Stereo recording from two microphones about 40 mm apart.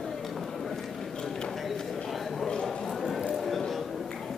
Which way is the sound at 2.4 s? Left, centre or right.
Centre.